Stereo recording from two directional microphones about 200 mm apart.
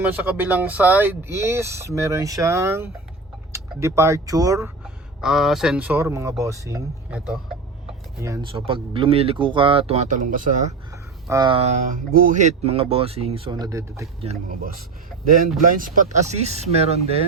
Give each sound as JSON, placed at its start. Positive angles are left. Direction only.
{"t": 0.0, "sound": "speech", "side_deg": -10}
{"t": 5.2, "sound": "speech", "side_deg": 0}
{"t": 8.2, "sound": "speech", "side_deg": -15}
{"t": 8.5, "sound": "speech", "side_deg": -30}
{"t": 10.9, "sound": "a sound", "side_deg": -15}
{"t": 12.1, "sound": "speech", "side_deg": -40}
{"t": 14.5, "sound": "speech", "side_deg": -45}
{"t": 15.8, "sound": "speech", "side_deg": -35}